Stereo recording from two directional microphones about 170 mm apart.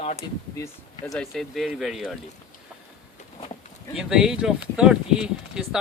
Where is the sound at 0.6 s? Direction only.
20° left (ahead or behind).